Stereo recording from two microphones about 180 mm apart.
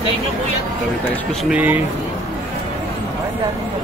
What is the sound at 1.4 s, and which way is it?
Speech, 10° right (ahead or behind).